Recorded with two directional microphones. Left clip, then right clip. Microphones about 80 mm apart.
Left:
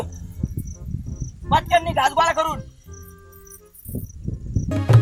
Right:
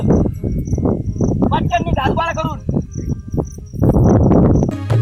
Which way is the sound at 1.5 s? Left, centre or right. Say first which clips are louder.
Left 3 dB; centre.